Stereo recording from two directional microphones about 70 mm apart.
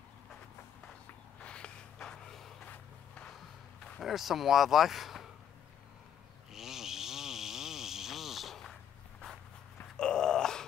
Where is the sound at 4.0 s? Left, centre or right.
Centre.